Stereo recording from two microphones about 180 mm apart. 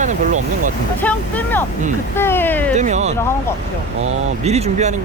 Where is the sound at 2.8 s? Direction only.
40° right (ahead or behind).